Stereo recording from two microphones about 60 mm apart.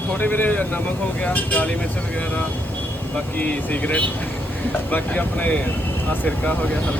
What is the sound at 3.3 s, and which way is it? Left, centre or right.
Speech, left.